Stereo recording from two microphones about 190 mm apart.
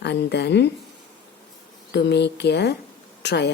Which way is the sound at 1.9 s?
60° left (ahead or behind).